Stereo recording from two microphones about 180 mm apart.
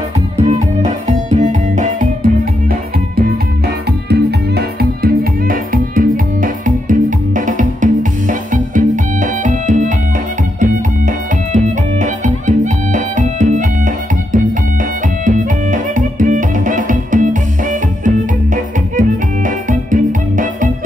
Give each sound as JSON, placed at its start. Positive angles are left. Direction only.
{"t": 0.4, "sound": "music", "side_deg": -40}